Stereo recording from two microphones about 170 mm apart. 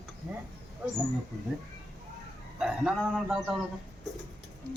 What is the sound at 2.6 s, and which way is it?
Speech, 5° right (ahead or behind).